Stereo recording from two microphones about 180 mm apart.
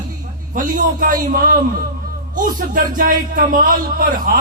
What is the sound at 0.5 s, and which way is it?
A man's voice, 50° right (ahead or behind).